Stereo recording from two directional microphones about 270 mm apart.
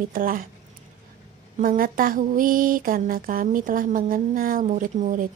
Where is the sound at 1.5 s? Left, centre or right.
Right.